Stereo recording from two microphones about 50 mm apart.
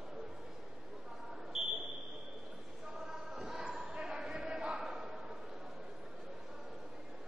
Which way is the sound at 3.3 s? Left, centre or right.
Centre.